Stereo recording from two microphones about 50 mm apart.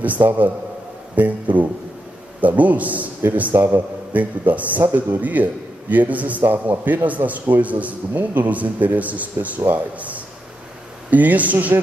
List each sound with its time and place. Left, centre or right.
0.0 s a man's voice: right